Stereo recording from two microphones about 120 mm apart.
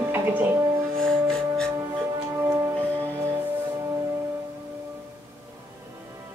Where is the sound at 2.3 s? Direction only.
20° right (ahead or behind).